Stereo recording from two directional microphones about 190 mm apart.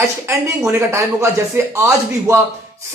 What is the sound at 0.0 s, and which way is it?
Speech, 15° right (ahead or behind).